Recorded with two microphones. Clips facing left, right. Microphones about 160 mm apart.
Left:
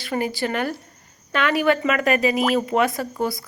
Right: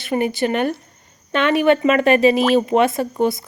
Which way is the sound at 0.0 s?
20° right (ahead or behind).